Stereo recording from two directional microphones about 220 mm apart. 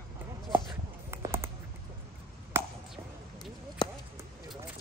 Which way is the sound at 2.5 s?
10° right (ahead or behind).